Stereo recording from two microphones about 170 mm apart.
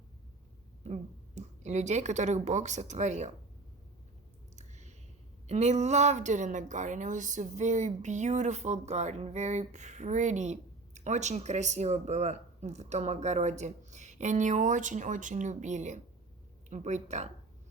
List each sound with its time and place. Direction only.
1.4 s a woman's voice: 45° right (ahead or behind)
4.5 s a sound: 40° right (ahead or behind)
5.5 s a woman's voice: 40° right (ahead or behind)